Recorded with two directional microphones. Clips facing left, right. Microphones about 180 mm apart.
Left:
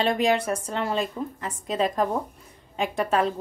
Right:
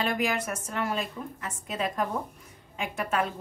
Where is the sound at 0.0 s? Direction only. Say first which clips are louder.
Left 6 dB; 30° left (ahead or behind).